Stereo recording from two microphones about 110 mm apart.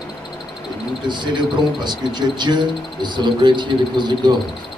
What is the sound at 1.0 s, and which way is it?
Speech, 45° right (ahead or behind).